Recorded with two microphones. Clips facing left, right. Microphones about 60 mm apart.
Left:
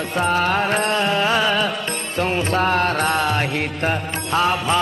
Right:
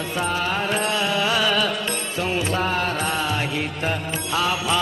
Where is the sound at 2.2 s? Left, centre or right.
Left.